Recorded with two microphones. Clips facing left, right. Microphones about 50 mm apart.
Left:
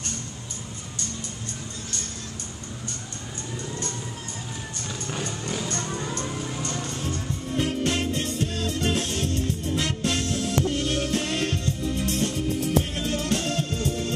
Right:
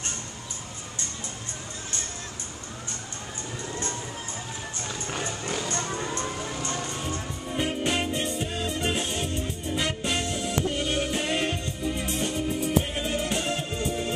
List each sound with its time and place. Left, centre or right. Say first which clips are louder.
3.6 s vehicle: right 1 dB; right
5.0 s music: left 1 dB; right